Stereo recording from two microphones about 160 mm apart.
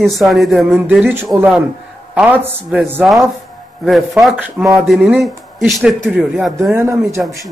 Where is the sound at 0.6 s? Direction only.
10° right (ahead or behind).